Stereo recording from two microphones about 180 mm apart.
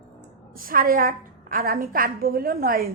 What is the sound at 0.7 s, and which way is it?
A woman's voice, 50° right (ahead or behind).